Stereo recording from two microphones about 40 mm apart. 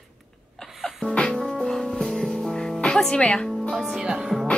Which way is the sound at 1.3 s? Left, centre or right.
Centre.